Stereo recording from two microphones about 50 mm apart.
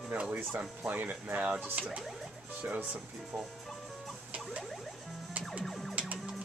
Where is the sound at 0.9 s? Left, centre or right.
Right.